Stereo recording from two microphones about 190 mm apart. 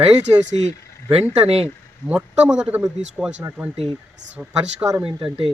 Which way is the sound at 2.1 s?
5° right (ahead or behind).